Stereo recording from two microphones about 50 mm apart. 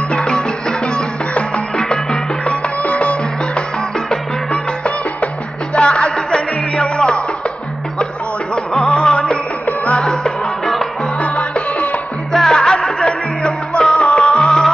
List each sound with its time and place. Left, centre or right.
0.1 s music: centre
8.8 s music: centre
12.3 s music: centre